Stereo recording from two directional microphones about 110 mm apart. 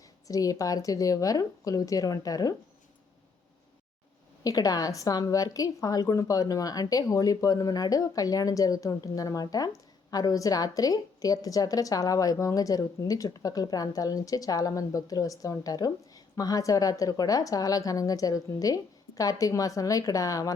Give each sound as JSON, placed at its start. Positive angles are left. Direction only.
{"t": 0.3, "sound": "a woman's voice", "side_deg": 35}
{"t": 4.4, "sound": "a woman's voice", "side_deg": 35}